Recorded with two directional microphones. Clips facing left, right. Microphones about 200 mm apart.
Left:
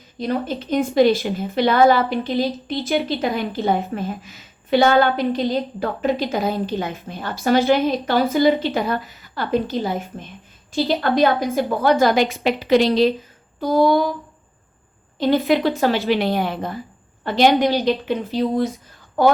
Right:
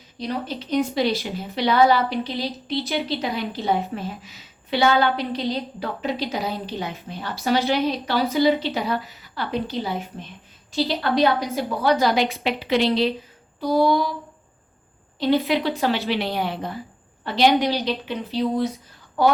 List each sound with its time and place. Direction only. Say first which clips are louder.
0.2 s a woman's voice: left 5 dB; 50° left (ahead or behind)
15.2 s a woman's voice: left 3 dB; 50° left (ahead or behind)